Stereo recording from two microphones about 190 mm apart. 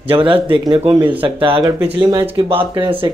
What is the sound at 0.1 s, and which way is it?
Speech, 25° right (ahead or behind).